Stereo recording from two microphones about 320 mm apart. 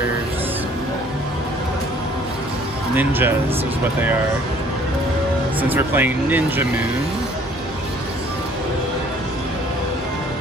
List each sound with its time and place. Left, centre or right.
3.0 s speech: centre
5.6 s speech: centre